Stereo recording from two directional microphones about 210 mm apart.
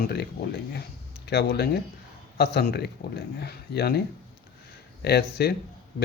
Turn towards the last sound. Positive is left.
turn(degrees=50)  # may be behind; listen again after turning